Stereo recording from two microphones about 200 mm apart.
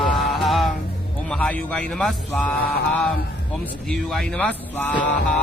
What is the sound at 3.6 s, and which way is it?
Speech, centre (ahead or behind).